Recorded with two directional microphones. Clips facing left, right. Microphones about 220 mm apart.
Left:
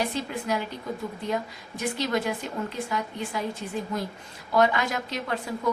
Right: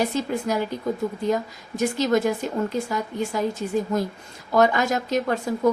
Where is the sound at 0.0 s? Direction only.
40° right (ahead or behind).